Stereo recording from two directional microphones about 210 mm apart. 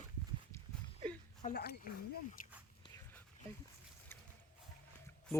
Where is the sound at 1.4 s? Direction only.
40° left (ahead or behind).